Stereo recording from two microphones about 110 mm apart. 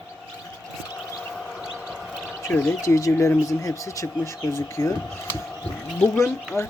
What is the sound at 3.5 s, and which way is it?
Speech, 30° left (ahead or behind).